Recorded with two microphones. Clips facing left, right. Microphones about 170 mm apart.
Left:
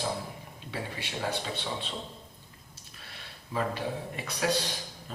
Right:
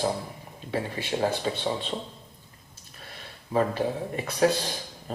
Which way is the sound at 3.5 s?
45° right (ahead or behind).